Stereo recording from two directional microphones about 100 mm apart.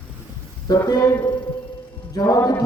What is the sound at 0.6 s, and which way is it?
Speech, 40° left (ahead or behind).